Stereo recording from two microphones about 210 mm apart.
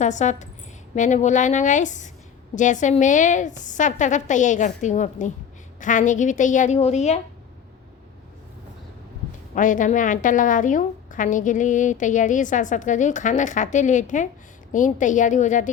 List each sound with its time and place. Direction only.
0.0 s a woman's voice: 35° left (ahead or behind)
9.6 s a woman's voice: 40° left (ahead or behind)